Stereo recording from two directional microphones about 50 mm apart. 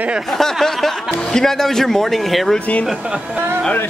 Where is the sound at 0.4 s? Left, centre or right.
Centre.